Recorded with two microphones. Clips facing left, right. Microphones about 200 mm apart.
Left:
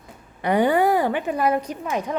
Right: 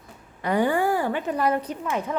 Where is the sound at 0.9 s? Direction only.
15° left (ahead or behind).